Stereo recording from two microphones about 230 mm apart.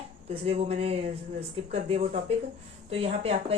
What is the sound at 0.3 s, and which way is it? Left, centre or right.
Speech, right.